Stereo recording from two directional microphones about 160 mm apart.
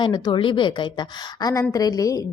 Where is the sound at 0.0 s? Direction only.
30° left (ahead or behind).